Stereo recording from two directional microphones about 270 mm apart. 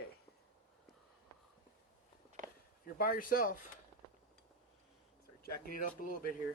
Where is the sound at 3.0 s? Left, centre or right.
Left.